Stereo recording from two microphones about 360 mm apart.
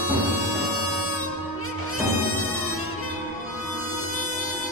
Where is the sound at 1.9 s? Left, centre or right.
Left.